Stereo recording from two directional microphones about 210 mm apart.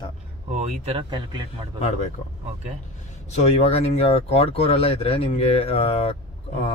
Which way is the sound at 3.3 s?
30° left (ahead or behind).